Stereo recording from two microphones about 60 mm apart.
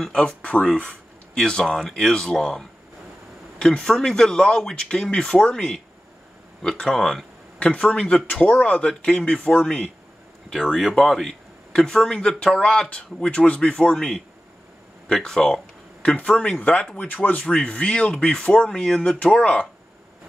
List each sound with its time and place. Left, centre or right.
0.0 s speech: centre
7.6 s speech: centre
10.9 s speech: centre
15.0 s a sound: centre
16.2 s speech: left
19.3 s speech: left